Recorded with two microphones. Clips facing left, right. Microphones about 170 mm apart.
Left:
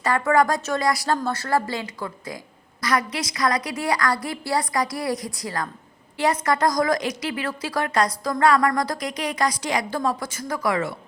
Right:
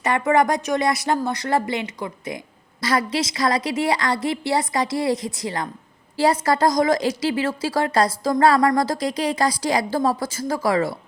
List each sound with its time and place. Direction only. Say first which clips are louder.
0.0 s a woman's voice: right 1 dB; 20° right (ahead or behind)